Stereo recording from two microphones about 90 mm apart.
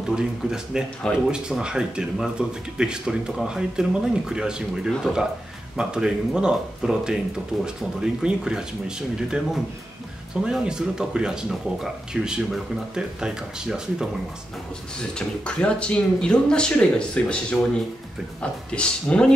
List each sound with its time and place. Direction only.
0.1 s speech: 10° right (ahead or behind)
15.0 s speech: 10° left (ahead or behind)